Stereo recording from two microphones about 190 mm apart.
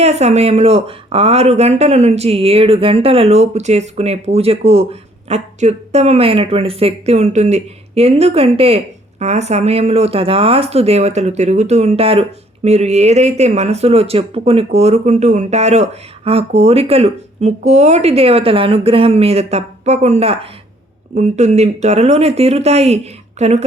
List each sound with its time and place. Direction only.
0.0 s speech: 35° right (ahead or behind)